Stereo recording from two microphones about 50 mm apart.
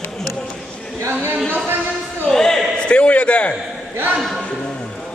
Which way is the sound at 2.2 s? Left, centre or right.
Centre.